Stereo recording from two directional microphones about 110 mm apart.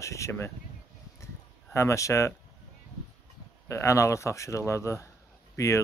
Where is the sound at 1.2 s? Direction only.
25° left (ahead or behind).